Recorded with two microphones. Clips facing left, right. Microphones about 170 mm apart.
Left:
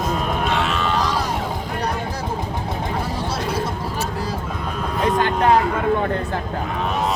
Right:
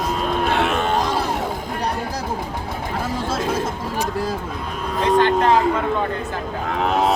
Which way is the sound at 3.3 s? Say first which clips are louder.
Right 2 dB; 50° right (ahead or behind).